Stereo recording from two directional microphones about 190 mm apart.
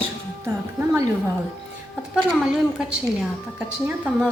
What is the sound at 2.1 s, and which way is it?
A woman's voice, 5° right (ahead or behind).